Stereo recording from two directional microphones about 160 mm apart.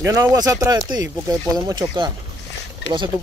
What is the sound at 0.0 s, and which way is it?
Speech, 20° right (ahead or behind).